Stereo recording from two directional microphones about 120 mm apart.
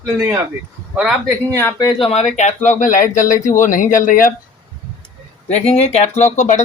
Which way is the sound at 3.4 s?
90° left.